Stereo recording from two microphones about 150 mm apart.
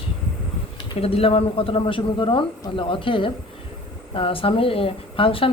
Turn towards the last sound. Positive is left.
turn(degrees=35)  # may be behind; listen again after turning